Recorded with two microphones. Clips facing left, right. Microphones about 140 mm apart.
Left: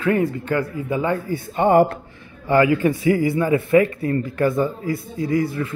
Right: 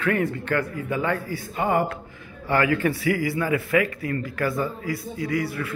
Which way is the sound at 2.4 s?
20° left (ahead or behind).